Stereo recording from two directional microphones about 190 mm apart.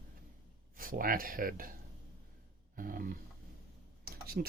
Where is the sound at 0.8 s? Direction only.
45° right (ahead or behind).